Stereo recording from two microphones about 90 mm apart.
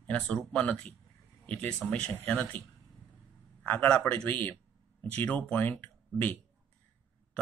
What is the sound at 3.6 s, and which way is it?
Speech, 15° left (ahead or behind).